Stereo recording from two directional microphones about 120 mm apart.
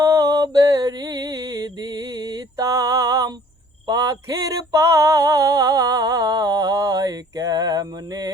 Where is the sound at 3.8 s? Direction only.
30° right (ahead or behind).